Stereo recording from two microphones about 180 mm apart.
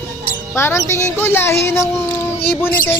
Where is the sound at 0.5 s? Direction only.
15° left (ahead or behind).